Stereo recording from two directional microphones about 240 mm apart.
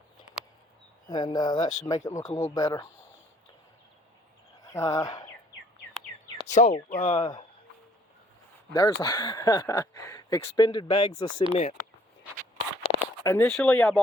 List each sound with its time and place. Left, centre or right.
1.0 s speech: centre
4.7 s speech: centre
6.5 s speech: left
8.7 s speech: centre
12.8 s speech: centre